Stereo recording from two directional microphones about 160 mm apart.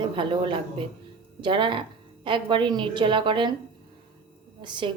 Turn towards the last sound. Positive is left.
turn(degrees=-30)  # may be behind; listen again after turning